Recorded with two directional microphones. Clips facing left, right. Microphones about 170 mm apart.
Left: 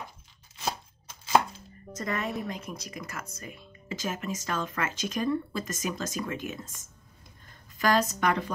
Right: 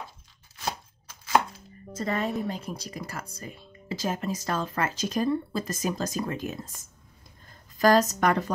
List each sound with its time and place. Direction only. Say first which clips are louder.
0.6 s chopping: even; 20° left (ahead or behind)
2.0 s a woman's voice: right 4 dB; 30° right (ahead or behind)
7.8 s a woman's voice: right 4 dB; 40° right (ahead or behind)